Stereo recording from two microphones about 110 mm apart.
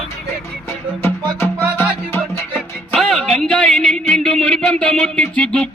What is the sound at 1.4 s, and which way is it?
Music, 20° left (ahead or behind).